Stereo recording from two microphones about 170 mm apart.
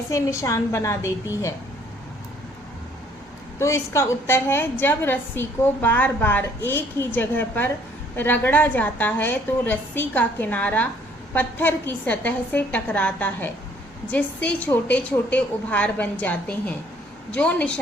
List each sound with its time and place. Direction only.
0.1 s a woman's voice: 15° left (ahead or behind)
3.6 s a woman's voice: 15° left (ahead or behind)